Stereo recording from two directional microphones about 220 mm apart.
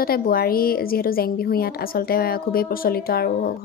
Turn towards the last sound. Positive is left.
turn(degrees=40)  # may be behind; listen again after turning